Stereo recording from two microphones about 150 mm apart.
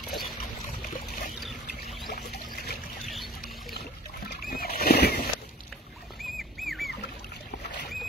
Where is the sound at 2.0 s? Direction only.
90° left.